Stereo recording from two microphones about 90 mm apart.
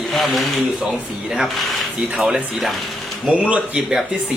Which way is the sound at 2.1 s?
10° right (ahead or behind).